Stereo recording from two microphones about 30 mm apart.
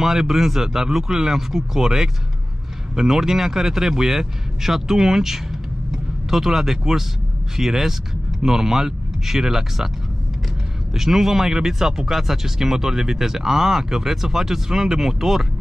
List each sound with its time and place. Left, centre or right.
0.0 s speech: centre
10.9 s speech: centre